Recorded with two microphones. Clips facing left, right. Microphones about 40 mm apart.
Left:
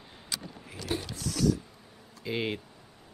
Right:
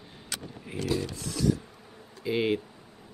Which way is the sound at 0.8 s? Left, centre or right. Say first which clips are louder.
Right 5 dB; right.